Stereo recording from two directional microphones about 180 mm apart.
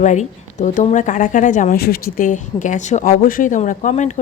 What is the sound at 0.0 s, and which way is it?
A woman's voice, 40° left (ahead or behind).